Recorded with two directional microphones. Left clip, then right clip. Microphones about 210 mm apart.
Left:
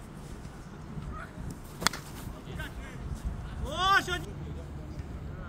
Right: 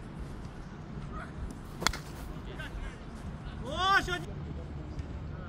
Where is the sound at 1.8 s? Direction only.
25° left (ahead or behind).